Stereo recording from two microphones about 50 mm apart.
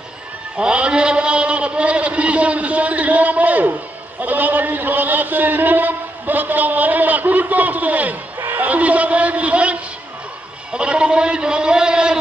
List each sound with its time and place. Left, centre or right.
0.6 s a man's voice: centre